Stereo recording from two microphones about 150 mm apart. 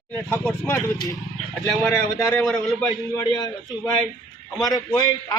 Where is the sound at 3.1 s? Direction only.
20° left (ahead or behind).